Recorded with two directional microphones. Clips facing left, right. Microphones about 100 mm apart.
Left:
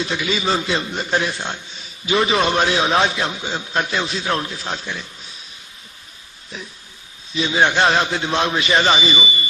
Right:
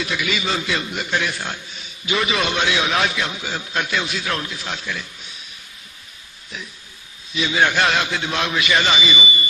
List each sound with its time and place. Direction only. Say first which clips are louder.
0.0 s a man's voice: left 2 dB; 30° left (ahead or behind)
7.3 s a man's voice: left 2 dB; 30° left (ahead or behind)